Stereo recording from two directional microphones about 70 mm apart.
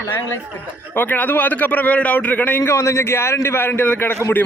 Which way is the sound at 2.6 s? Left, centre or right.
Left.